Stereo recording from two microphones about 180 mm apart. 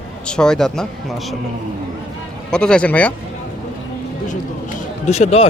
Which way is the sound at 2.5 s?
5° left (ahead or behind).